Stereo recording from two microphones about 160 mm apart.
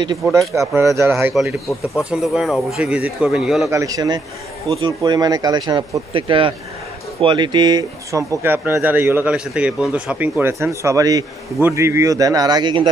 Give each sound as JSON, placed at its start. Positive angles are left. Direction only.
{"t": 0.4, "sound": "speech", "side_deg": 0}
{"t": 0.7, "sound": "speech", "side_deg": -15}
{"t": 2.0, "sound": "speech", "side_deg": -5}
{"t": 3.7, "sound": "speech", "side_deg": -20}